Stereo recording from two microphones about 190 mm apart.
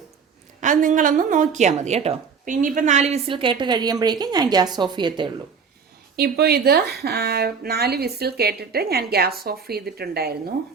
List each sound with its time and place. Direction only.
0.6 s a woman's voice: 40° right (ahead or behind); by 5.3 s 25° right (ahead or behind)
6.1 s speech: 55° right (ahead or behind)